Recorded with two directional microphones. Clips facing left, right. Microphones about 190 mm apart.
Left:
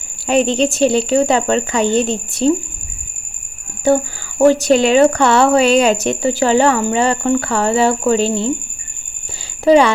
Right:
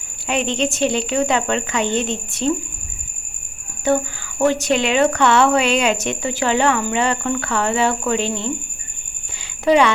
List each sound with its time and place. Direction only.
0.3 s speech: 35° left (ahead or behind)
3.8 s speech: 35° left (ahead or behind)
9.6 s speech: 35° left (ahead or behind)